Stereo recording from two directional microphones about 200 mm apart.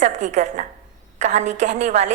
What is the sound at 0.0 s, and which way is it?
A woman's voice, 35° right (ahead or behind).